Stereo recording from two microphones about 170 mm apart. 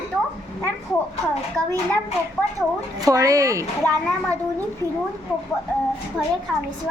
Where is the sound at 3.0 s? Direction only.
20° right (ahead or behind).